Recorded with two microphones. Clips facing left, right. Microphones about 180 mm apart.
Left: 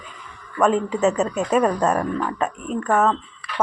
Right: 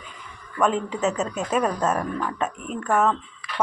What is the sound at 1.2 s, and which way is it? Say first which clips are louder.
Speech: left 5 dB; 35° left (ahead or behind).